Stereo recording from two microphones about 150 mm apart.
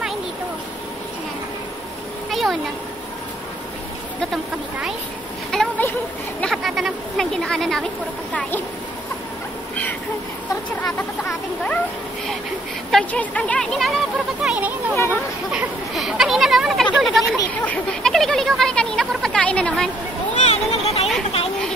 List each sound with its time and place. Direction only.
5.5 s a sound: 5° left (ahead or behind)
6.4 s speech: centre (ahead or behind)
10.5 s speech: 15° left (ahead or behind)
12.9 s speech: 10° left (ahead or behind)
14.4 s speech: 5° right (ahead or behind); by 19.9 s 10° left (ahead or behind)
20.3 s a sound: 45° left (ahead or behind)